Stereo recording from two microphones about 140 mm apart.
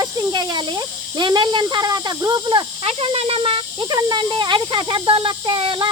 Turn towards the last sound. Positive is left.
turn(degrees=-40)  # may be behind; listen again after turning